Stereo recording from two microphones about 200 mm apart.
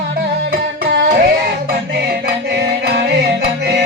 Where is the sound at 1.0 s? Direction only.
50° right (ahead or behind).